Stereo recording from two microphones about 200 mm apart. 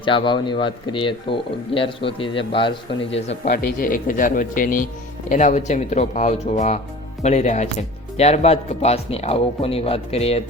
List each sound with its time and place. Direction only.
0.0 s speech: 25° left (ahead or behind)
3.5 s speech: 45° left (ahead or behind)